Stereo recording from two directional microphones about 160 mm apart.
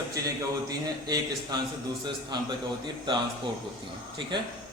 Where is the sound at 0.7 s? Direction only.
25° right (ahead or behind).